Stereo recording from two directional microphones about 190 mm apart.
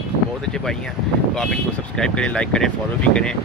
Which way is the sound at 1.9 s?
5° left (ahead or behind).